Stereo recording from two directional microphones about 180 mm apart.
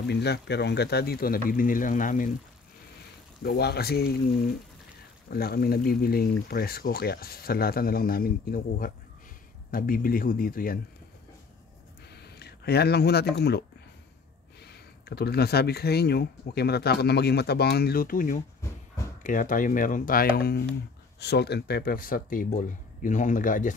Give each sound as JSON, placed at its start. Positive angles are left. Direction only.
{"t": 0.0, "sound": "speech", "side_deg": 65}
{"t": 3.4, "sound": "speech", "side_deg": 60}
{"t": 12.1, "sound": "speech", "side_deg": 65}